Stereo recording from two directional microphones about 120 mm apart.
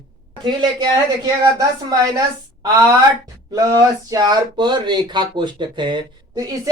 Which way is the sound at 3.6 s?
30° right (ahead or behind).